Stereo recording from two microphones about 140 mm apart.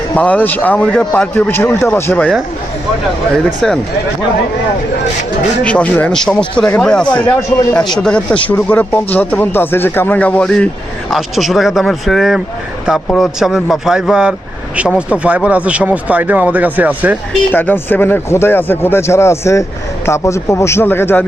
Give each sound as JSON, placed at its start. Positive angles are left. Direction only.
{"t": 0.2, "sound": "speech", "side_deg": 10}
{"t": 3.3, "sound": "speech", "side_deg": 5}
{"t": 5.6, "sound": "speech", "side_deg": 10}
{"t": 7.3, "sound": "a man's voice", "side_deg": 20}
{"t": 7.9, "sound": "speech", "side_deg": 5}
{"t": 17.5, "sound": "a man's voice", "side_deg": 15}